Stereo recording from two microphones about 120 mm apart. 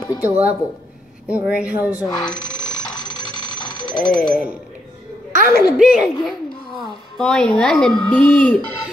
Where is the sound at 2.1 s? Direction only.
5° left (ahead or behind).